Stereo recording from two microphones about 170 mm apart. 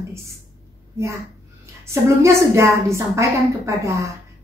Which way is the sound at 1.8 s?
15° right (ahead or behind).